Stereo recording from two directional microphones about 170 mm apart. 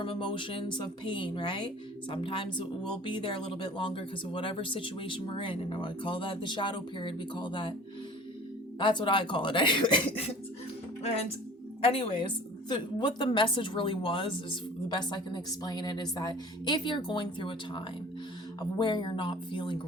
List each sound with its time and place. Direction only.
0.0 s speech: 30° left (ahead or behind)
8.8 s speech: 30° left (ahead or behind)